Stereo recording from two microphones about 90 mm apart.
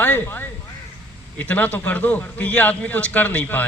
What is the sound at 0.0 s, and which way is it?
Speech, 20° left (ahead or behind).